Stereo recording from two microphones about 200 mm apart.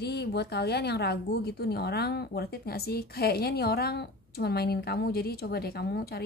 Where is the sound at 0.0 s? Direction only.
55° left (ahead or behind).